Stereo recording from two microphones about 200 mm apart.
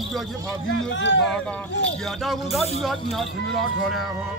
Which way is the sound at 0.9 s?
65° left (ahead or behind).